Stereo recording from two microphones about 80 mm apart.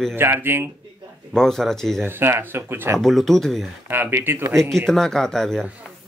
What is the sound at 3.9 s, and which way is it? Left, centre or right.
Speech, right.